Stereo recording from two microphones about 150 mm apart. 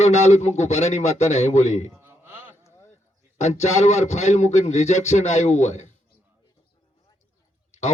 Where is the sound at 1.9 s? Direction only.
15° right (ahead or behind).